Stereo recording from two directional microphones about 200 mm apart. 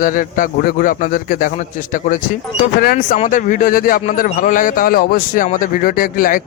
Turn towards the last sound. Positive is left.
turn(degrees=45)  # may be behind; listen again after turning